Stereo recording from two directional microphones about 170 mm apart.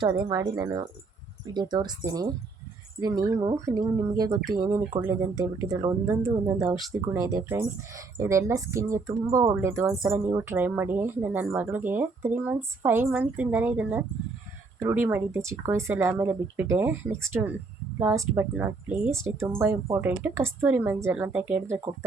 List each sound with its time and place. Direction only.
0.0 s speech: 20° right (ahead or behind)